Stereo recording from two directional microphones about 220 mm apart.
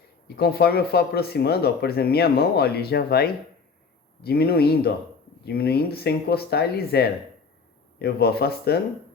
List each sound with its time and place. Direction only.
0.3 s speech: 45° left (ahead or behind)